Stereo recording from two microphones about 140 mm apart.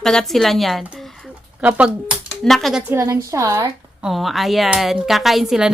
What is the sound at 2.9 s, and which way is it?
Speech, 20° right (ahead or behind).